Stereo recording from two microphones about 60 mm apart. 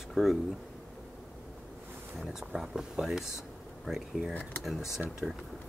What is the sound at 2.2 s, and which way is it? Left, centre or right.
Speech, centre.